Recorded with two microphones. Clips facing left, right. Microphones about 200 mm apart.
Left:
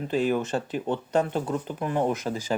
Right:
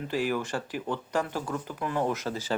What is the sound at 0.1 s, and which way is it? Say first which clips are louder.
Speech: left 5 dB; 20° left (ahead or behind).